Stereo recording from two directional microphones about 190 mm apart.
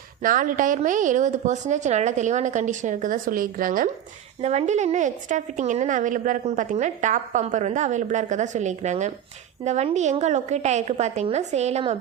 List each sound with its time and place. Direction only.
0.2 s a woman's voice: 45° right (ahead or behind)
4.4 s a woman's voice: 35° right (ahead or behind)